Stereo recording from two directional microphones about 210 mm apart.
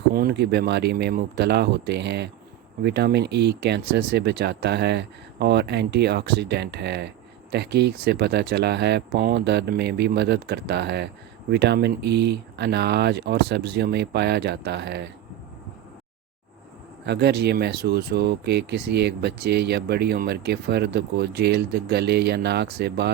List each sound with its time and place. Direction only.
0.1 s speech: 45° right (ahead or behind)
17.1 s speech: 50° right (ahead or behind)